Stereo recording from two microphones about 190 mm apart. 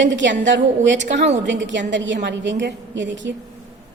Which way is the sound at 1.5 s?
70° right (ahead or behind).